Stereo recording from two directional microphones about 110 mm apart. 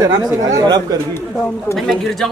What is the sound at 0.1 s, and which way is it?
Speech, 35° right (ahead or behind).